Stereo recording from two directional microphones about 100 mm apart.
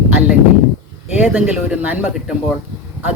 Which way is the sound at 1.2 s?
15° right (ahead or behind).